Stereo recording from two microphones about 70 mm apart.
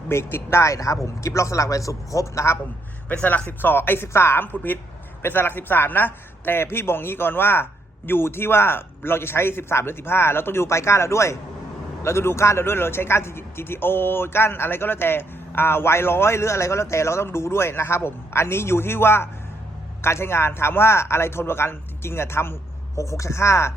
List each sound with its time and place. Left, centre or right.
0.1 s a man's voice: left
3.1 s a woman's voice: left